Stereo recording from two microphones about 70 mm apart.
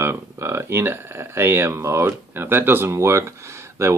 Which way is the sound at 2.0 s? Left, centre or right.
Right.